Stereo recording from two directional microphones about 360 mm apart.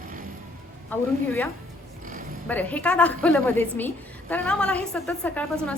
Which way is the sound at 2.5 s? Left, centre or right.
Centre.